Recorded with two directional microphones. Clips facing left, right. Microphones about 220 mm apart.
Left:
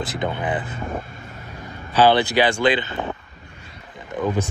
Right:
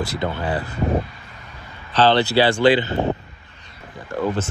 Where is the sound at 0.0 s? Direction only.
20° left (ahead or behind).